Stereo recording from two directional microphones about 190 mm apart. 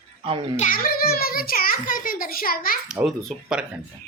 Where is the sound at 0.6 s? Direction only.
45° left (ahead or behind).